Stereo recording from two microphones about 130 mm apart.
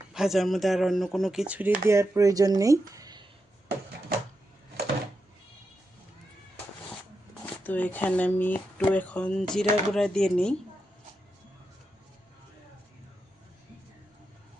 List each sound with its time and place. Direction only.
0.1 s speech: 5° right (ahead or behind)
1.9 s speech: 25° right (ahead or behind)
7.6 s speech: 15° left (ahead or behind)